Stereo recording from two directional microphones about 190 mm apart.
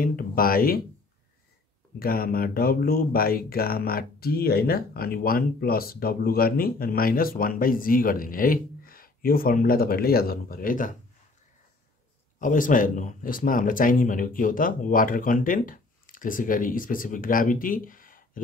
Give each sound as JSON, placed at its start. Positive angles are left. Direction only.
{"t": 0.0, "sound": "speech", "side_deg": 50}
{"t": 2.0, "sound": "speech", "side_deg": 50}
{"t": 12.4, "sound": "speech", "side_deg": 45}